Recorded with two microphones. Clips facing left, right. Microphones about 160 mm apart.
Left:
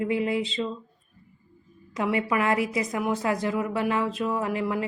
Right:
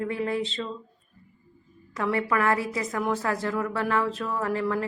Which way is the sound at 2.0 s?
15° left (ahead or behind).